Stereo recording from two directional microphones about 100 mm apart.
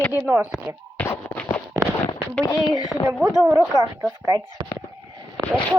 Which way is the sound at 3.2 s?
30° right (ahead or behind).